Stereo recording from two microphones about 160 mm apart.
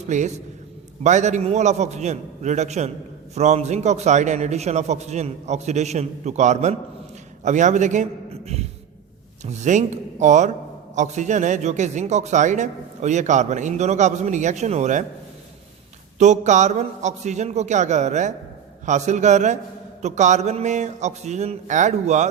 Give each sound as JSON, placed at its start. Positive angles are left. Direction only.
{"t": 0.1, "sound": "a man's voice", "side_deg": -45}
{"t": 9.4, "sound": "a man's voice", "side_deg": -50}
{"t": 16.1, "sound": "a man's voice", "side_deg": -45}